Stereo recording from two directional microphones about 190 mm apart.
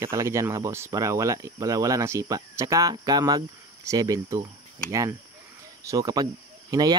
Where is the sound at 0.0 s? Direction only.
15° right (ahead or behind).